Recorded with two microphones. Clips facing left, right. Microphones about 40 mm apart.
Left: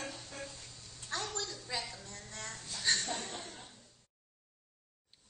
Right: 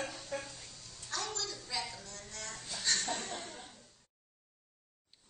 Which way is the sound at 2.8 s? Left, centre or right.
Left.